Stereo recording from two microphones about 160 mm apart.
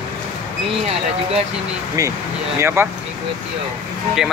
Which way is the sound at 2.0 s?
20° right (ahead or behind).